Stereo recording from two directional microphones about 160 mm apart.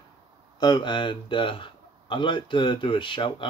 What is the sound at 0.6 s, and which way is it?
Speech, 30° left (ahead or behind).